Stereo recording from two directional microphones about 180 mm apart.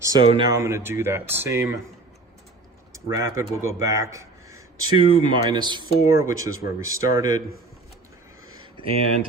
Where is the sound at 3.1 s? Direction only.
15° right (ahead or behind).